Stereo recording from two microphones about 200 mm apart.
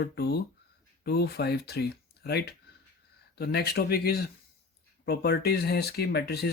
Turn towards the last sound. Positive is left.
turn(degrees=55)  # may be behind; listen again after turning